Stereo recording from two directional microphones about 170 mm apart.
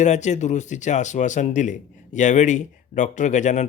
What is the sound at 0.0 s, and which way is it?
Speech, 45° left (ahead or behind).